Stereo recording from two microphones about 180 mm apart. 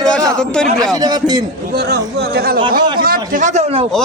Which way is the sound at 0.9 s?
20° right (ahead or behind).